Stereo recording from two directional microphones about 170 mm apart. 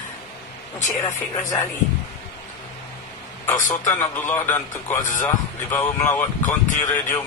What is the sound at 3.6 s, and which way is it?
Speech, 15° left (ahead or behind).